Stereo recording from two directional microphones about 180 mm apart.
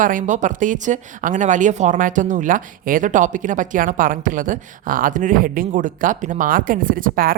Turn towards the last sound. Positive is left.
turn(degrees=-50)  # may be behind; listen again after turning